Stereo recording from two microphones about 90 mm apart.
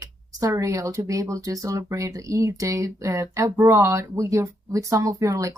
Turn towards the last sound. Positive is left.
turn(degrees=-40)  # may be behind; listen again after turning